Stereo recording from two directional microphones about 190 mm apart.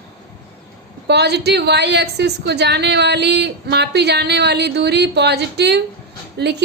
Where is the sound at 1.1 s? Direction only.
60° right (ahead or behind).